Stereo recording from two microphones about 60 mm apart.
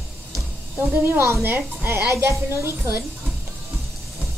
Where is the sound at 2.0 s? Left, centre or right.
Right.